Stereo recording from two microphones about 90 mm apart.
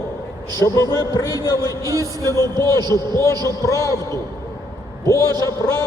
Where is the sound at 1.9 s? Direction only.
40° right (ahead or behind).